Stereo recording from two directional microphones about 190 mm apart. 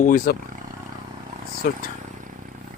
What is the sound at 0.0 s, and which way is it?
Speech, 45° left (ahead or behind).